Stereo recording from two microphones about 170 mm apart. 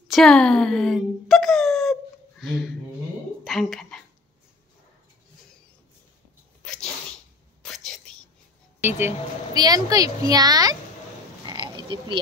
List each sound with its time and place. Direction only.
0.1 s speech: 5° left (ahead or behind)
3.4 s a sound: centre (ahead or behind)
6.6 s sneeze: 5° left (ahead or behind)
7.6 s whispering: 5° left (ahead or behind)
8.8 s speech: 15° right (ahead or behind)
11.4 s frog: 25° right (ahead or behind)